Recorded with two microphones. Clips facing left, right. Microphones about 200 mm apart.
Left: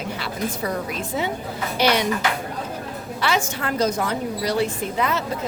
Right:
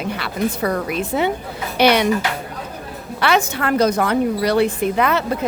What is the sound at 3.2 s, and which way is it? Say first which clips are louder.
A woman's voice: right 5 dB; 65° right (ahead or behind).